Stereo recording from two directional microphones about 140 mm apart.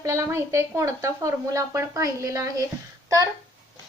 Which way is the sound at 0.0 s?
20° right (ahead or behind).